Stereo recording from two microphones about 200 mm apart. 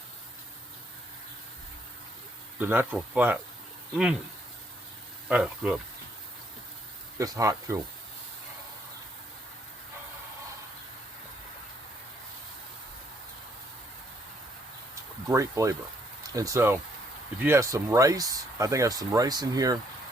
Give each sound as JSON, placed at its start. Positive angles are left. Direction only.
{"t": 2.6, "sound": "speech", "side_deg": -10}
{"t": 5.3, "sound": "speech", "side_deg": -5}
{"t": 7.2, "sound": "speech", "side_deg": -15}
{"t": 15.3, "sound": "speech", "side_deg": -15}